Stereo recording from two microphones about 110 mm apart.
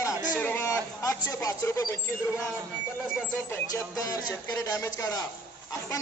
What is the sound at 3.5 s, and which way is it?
Speech, 30° left (ahead or behind).